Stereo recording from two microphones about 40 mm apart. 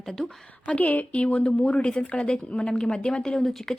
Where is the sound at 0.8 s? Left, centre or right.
Left.